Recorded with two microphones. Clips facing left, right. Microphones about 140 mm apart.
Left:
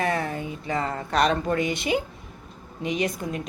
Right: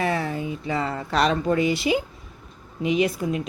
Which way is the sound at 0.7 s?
40° left (ahead or behind).